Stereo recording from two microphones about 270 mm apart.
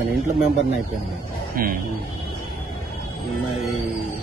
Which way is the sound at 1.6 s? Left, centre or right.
Right.